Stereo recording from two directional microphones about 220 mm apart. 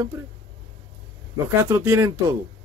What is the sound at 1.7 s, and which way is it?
Speech, 15° right (ahead or behind).